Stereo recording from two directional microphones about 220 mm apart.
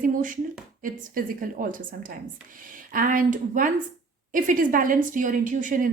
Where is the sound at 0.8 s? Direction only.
40° right (ahead or behind).